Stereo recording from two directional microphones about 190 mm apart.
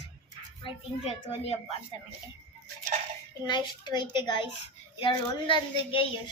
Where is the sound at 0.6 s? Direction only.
30° left (ahead or behind).